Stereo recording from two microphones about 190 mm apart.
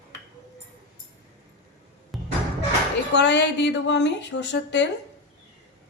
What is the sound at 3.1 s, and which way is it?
A woman's voice, 65° left (ahead or behind).